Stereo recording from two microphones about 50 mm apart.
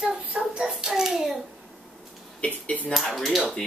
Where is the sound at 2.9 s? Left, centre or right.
Centre.